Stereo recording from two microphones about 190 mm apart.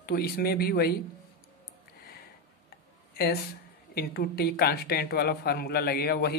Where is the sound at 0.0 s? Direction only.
55° left (ahead or behind).